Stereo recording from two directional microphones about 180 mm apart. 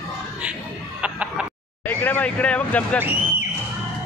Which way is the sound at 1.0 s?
5° right (ahead or behind).